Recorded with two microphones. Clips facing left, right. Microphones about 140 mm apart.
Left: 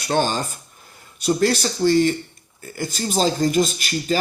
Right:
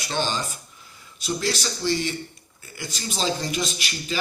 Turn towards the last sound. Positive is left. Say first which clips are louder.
# left 8 dB
turn(degrees=45)  # may be behind; listen again after turning